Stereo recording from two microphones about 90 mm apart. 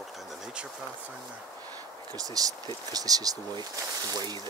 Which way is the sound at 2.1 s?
45° right (ahead or behind).